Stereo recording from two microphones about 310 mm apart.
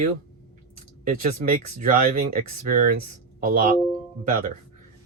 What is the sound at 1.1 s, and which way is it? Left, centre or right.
Speech, right.